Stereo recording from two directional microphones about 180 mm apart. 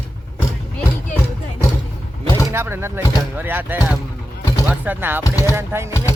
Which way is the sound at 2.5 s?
15° right (ahead or behind).